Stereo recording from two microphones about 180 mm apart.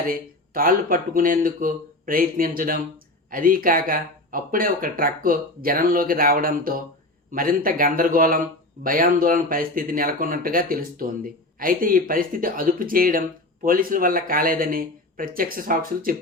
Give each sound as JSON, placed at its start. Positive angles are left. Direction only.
{"t": 0.1, "sound": "a man's voice", "side_deg": -50}